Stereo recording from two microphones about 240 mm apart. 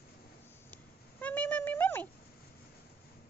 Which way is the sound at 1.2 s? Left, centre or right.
Centre.